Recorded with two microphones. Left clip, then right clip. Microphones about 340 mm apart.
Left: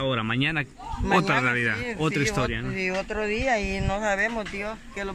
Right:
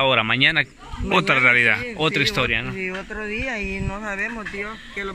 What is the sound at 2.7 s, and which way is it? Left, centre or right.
Speech, left.